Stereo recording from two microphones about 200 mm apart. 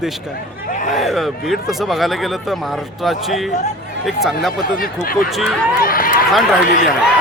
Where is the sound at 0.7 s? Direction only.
40° left (ahead or behind).